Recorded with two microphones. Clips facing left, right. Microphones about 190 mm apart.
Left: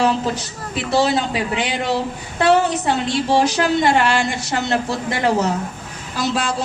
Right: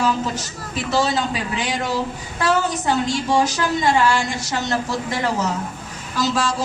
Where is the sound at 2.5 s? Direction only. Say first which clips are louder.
Left 4 dB; 65° left (ahead or behind).